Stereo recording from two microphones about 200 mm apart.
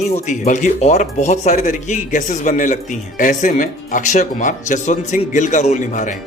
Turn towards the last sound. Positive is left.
turn(degrees=35)  # may be behind; listen again after turning